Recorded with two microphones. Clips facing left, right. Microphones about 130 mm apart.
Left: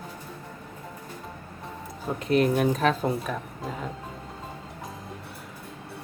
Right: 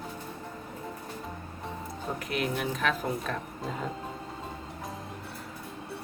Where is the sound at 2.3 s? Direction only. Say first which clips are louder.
Left 10 dB; 40° left (ahead or behind).